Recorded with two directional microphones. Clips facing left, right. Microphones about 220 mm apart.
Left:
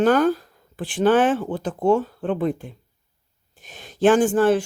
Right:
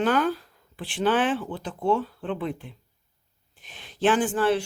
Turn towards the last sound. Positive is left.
turn(degrees=45)  # may be behind; listen again after turning